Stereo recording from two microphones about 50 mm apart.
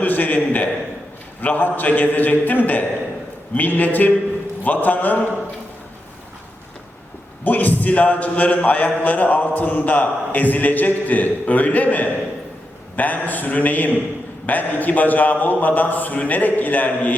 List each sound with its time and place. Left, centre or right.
0.0 s a man's voice: left
7.4 s a man's voice: left